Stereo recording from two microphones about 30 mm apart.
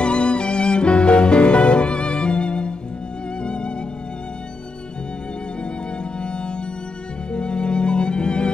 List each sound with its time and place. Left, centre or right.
0.0 s music: left
6.2 s music: left